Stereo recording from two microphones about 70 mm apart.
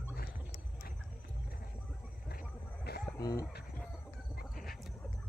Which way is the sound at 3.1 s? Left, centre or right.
Left.